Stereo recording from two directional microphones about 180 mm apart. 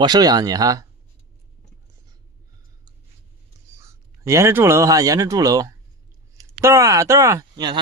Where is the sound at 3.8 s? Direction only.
15° right (ahead or behind).